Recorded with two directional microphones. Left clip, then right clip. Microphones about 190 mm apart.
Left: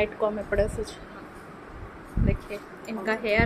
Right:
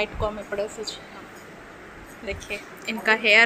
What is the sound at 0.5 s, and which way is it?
Speech, 25° left (ahead or behind).